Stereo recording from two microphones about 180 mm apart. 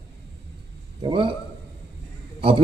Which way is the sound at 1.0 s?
30° right (ahead or behind).